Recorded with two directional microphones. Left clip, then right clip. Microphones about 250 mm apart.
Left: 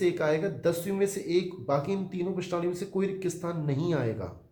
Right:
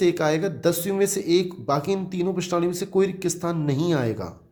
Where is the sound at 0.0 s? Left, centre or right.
Right.